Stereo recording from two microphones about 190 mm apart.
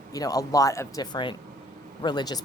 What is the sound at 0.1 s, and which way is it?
A woman's voice, 20° left (ahead or behind).